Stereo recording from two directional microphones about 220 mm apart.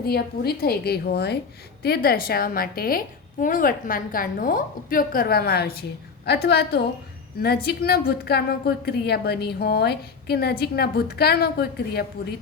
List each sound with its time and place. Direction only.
0.0 s a woman's voice: 45° left (ahead or behind)